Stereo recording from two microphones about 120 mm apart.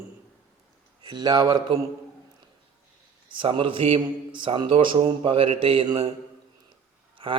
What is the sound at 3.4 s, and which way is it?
A man's voice, 45° right (ahead or behind).